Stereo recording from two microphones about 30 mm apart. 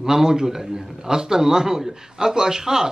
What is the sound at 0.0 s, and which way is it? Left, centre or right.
Speech, centre.